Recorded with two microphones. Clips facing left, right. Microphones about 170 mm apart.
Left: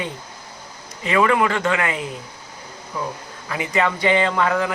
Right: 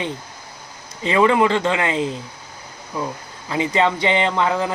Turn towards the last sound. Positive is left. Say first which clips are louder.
# even
turn(degrees=-25)  # may be behind; listen again after turning